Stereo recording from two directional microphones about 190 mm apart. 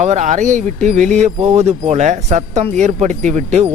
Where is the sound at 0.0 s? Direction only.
35° right (ahead or behind).